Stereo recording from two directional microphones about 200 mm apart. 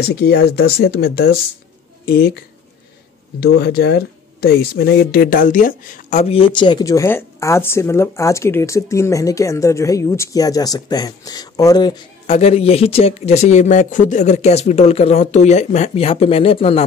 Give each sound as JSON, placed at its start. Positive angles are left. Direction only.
{"t": 0.0, "sound": "speech", "side_deg": 50}
{"t": 3.5, "sound": "speech", "side_deg": 55}
{"t": 12.3, "sound": "speech", "side_deg": 30}